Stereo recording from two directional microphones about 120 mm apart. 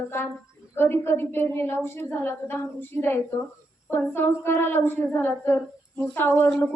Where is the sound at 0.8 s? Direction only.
20° left (ahead or behind).